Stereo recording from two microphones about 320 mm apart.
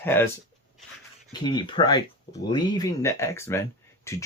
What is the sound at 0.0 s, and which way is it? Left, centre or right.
Speech, centre.